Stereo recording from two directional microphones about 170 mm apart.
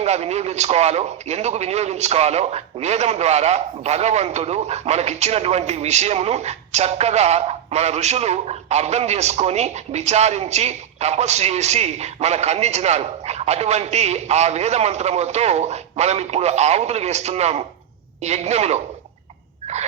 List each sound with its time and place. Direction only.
0.0 s a man's voice: 40° right (ahead or behind)